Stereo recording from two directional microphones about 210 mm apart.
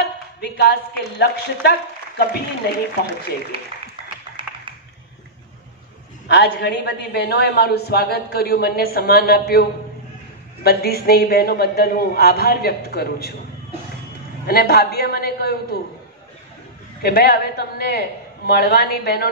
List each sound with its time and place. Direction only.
0.4 s a man's voice: 50° left (ahead or behind)
4.4 s computer keyboard: 25° right (ahead or behind)
6.2 s a man's voice: 50° left (ahead or behind)
14.4 s a man's voice: 45° left (ahead or behind)
17.0 s a man's voice: 45° left (ahead or behind)